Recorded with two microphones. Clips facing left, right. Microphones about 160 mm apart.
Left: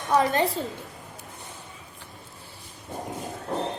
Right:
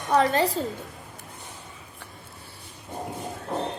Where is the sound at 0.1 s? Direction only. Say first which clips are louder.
Right 1 dB; 35° right (ahead or behind).